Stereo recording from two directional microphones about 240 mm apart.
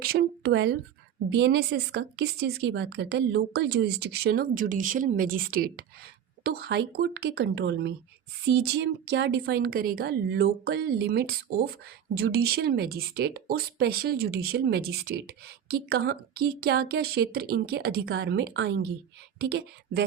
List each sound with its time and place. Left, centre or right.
0.0 s a woman's voice: right